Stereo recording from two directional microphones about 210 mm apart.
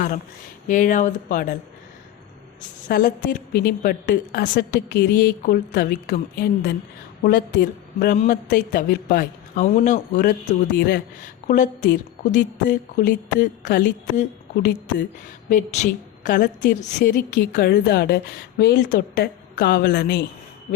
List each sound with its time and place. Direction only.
0.7 s speech: 40° left (ahead or behind)
2.9 s a woman's voice: 45° left (ahead or behind)
10.8 s a woman's voice: 50° left (ahead or behind)
11.4 s a woman's voice: 35° left (ahead or behind)
15.4 s a woman's voice: 35° left (ahead or behind)